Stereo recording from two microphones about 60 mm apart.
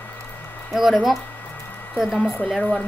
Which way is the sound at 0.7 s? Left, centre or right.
Centre.